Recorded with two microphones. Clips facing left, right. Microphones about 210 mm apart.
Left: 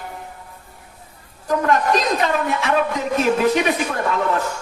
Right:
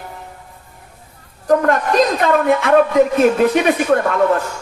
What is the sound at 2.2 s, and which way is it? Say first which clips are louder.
A man's voice: right 6 dB; 55° right (ahead or behind).